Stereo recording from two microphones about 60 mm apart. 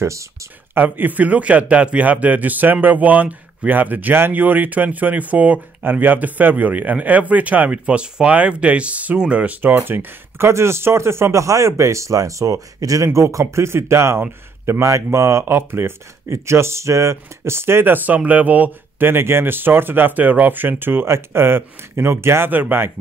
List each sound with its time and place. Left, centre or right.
0.7 s a man's voice: right
9.8 s speech: right
19.0 s speech: right
22.5 s speech: right